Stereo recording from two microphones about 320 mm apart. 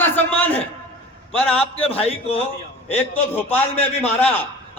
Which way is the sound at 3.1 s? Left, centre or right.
Centre.